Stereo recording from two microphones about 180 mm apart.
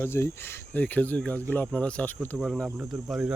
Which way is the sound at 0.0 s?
15° left (ahead or behind).